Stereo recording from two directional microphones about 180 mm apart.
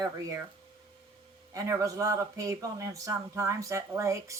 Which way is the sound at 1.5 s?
20° right (ahead or behind).